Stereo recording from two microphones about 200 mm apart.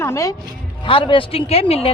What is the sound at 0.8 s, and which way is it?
A woman's voice, 25° left (ahead or behind).